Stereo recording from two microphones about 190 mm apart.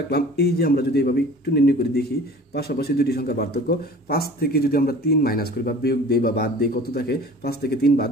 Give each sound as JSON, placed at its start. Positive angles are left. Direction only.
{"t": 0.1, "sound": "speech", "side_deg": 55}